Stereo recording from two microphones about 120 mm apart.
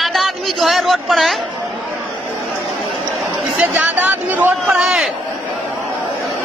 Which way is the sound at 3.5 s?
15° right (ahead or behind).